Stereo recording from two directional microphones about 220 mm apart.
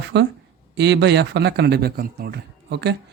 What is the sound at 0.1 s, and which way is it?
Speech, 55° right (ahead or behind).